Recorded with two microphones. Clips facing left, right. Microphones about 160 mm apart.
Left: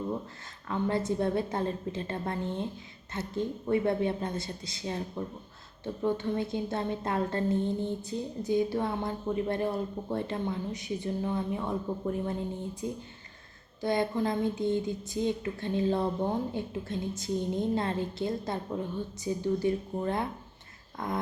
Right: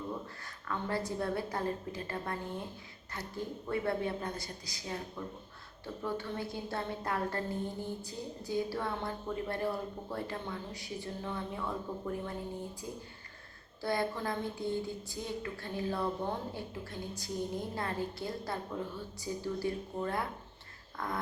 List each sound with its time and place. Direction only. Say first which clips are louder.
0.7 s a woman's voice: left 6 dB; 20° left (ahead or behind)